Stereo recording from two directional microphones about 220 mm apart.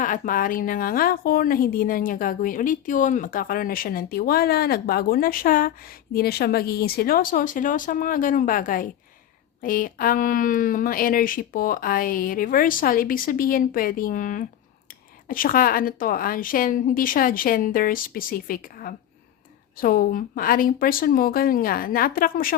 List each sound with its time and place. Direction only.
0.0 s a woman's voice: 35° left (ahead or behind)